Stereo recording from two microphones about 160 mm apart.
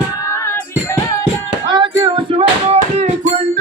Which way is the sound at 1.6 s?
30° right (ahead or behind).